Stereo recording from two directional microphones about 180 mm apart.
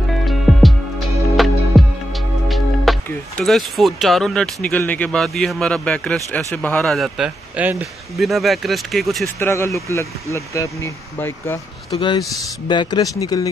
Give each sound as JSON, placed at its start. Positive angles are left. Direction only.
{"t": 0.2, "sound": "music", "side_deg": 0}
{"t": 1.3, "sound": "speech", "side_deg": 0}
{"t": 9.4, "sound": "speech", "side_deg": 15}
{"t": 11.9, "sound": "speech", "side_deg": 25}